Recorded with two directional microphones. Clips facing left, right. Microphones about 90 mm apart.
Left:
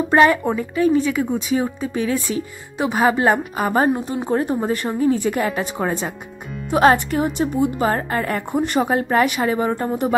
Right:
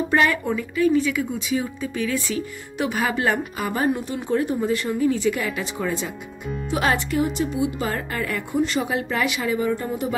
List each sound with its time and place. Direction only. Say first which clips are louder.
0.1 s a woman's voice: left 7 dB; 35° left (ahead or behind)
8.3 s a woman's voice: left 2 dB; 50° left (ahead or behind)